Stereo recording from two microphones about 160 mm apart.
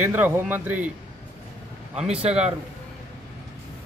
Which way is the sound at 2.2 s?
40° right (ahead or behind).